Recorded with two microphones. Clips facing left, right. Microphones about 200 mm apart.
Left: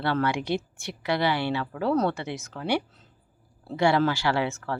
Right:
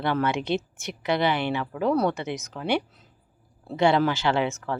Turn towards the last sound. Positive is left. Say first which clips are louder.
# right 2 dB
turn(degrees=-20)  # may be behind; listen again after turning